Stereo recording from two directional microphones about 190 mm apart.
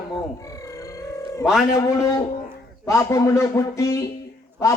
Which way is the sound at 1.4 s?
Centre (ahead or behind).